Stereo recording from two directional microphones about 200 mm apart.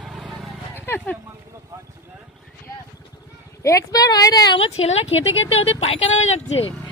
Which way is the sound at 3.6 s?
15° left (ahead or behind).